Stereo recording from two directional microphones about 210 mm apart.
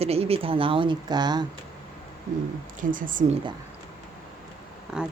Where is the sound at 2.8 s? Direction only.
40° right (ahead or behind).